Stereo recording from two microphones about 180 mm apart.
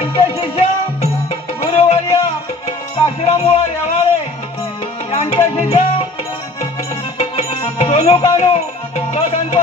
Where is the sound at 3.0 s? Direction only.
35° left (ahead or behind).